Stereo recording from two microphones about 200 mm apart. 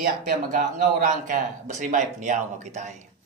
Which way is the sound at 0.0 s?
45° right (ahead or behind).